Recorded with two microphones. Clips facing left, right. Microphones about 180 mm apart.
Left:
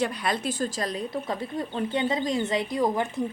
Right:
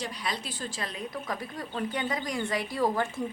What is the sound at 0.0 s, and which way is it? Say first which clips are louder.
A woman's voice: left 8 dB; 55° left (ahead or behind).